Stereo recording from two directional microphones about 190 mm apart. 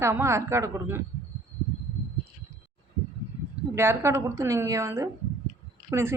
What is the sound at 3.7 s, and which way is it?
A woman's voice, 15° right (ahead or behind).